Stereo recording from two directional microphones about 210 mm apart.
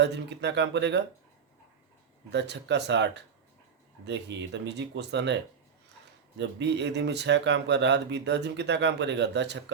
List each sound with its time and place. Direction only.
0.0 s speech: 55° right (ahead or behind)
2.3 s speech: 55° right (ahead or behind)